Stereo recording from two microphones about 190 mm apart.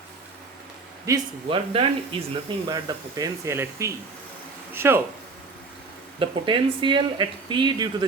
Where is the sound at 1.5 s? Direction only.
30° right (ahead or behind).